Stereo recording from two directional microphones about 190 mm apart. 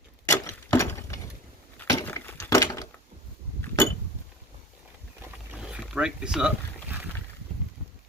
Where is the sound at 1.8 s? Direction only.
15° left (ahead or behind).